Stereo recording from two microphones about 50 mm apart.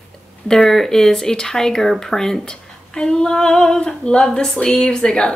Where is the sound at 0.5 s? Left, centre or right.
Centre.